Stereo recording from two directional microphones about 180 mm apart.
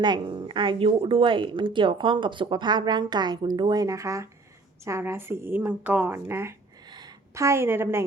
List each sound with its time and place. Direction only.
0.0 s a woman's voice: 25° right (ahead or behind)